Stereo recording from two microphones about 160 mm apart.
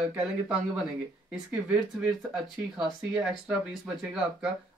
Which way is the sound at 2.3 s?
5° right (ahead or behind).